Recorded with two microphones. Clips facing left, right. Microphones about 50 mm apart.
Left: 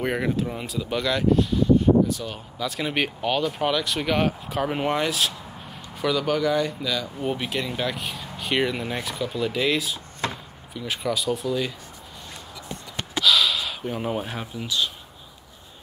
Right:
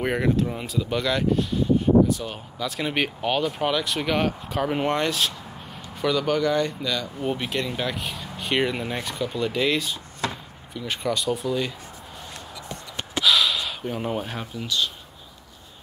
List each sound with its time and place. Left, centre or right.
0.0 s speech: centre
10.2 s chop: left
10.7 s speech: centre
13.1 s gasp: centre